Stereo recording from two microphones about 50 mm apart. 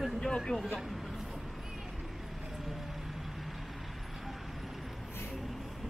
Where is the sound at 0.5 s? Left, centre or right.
Centre.